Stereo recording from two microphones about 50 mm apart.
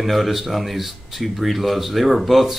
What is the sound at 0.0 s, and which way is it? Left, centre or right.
Speech, centre.